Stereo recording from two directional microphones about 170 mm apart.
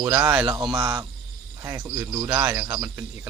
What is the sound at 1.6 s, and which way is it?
Speech, 15° right (ahead or behind).